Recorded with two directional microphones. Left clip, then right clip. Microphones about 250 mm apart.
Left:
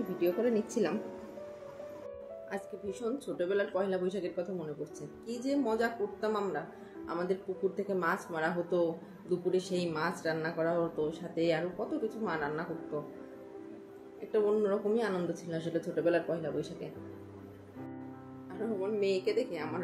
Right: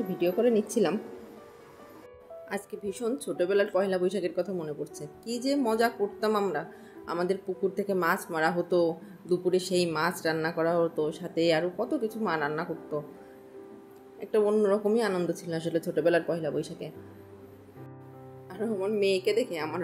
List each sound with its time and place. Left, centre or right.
0.2 s speech: right
2.5 s speech: right
14.3 s speech: right
18.5 s speech: right